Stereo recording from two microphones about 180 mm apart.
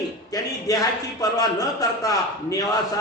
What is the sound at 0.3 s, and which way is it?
A man's voice, 20° left (ahead or behind).